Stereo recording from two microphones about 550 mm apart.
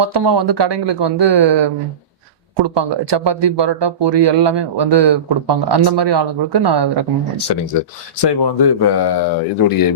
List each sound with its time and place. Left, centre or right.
0.0 s speech: right
7.8 s speech: left